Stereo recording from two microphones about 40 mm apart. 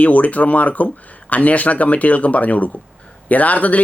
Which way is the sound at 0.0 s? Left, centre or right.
Left.